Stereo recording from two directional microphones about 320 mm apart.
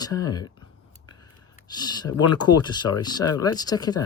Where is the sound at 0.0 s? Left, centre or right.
Centre.